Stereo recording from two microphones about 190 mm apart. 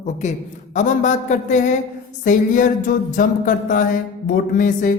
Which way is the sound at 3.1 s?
45° left (ahead or behind).